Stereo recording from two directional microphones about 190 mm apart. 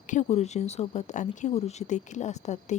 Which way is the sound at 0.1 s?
35° left (ahead or behind).